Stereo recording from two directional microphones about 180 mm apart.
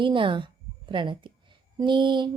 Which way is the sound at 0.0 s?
30° right (ahead or behind).